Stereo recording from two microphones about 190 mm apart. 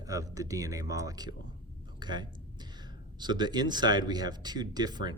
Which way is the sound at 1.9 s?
25° right (ahead or behind).